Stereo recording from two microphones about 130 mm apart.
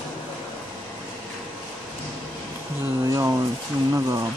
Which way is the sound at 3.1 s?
25° right (ahead or behind).